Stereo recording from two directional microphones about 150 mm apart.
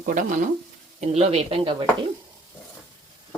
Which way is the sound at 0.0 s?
60° right (ahead or behind).